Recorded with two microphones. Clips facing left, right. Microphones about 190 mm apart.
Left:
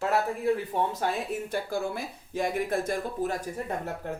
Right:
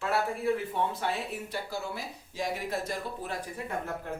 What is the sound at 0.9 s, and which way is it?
A woman's voice, 45° left (ahead or behind).